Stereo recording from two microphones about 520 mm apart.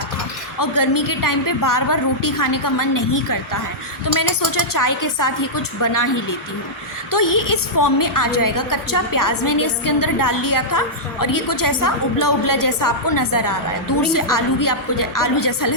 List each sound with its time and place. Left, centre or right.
0.6 s a woman's voice: left